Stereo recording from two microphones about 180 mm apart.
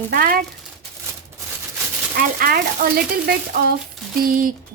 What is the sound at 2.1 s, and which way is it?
A woman's voice, 55° right (ahead or behind).